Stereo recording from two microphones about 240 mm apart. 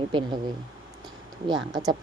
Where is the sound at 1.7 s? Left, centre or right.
Centre.